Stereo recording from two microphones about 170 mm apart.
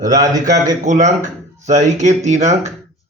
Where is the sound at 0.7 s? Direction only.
45° right (ahead or behind).